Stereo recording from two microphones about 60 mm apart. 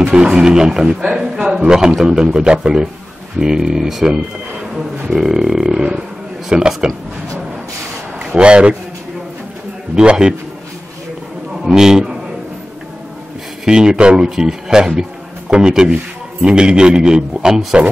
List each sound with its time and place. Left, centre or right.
0.1 s a man's voice: centre
8.4 s a man's voice: centre
9.9 s a man's voice: centre
11.6 s a man's voice: centre
13.7 s a man's voice: centre